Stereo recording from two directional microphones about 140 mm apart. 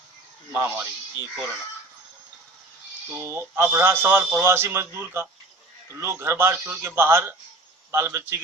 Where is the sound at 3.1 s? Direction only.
15° right (ahead or behind).